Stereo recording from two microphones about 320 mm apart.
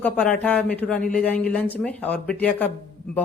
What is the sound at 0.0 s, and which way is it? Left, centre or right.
A man's voice, centre.